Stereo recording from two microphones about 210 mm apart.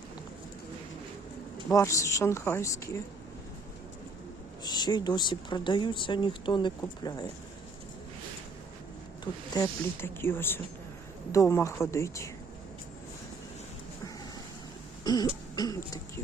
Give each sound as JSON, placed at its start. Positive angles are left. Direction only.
{"t": 1.7, "sound": "speech", "side_deg": 15}
{"t": 4.6, "sound": "speech", "side_deg": 20}
{"t": 9.2, "sound": "speech", "side_deg": 20}
{"t": 15.0, "sound": "throat clearing", "side_deg": 20}